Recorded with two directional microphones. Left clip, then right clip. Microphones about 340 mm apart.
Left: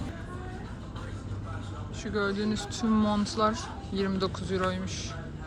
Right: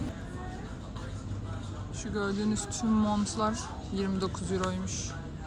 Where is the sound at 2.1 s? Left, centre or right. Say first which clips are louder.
Left 3 dB; centre.